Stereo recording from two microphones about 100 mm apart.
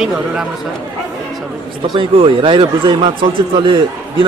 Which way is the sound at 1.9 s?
55° right (ahead or behind).